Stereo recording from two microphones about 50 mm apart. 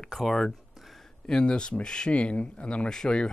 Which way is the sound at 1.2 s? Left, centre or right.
Centre.